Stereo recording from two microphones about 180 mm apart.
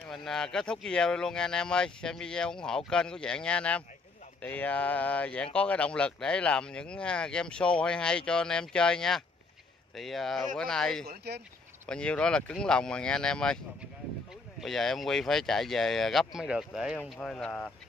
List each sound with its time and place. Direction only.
0.0 s speech: centre (ahead or behind)
11.1 s speech: 65° right (ahead or behind)
11.8 s speech: 5° left (ahead or behind)
14.6 s speech: centre (ahead or behind)